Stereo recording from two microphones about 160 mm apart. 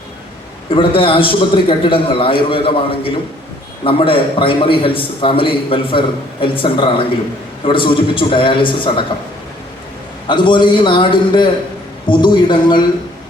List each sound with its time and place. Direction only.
0.8 s a man's voice: 35° left (ahead or behind)
10.2 s a man's voice: 30° left (ahead or behind)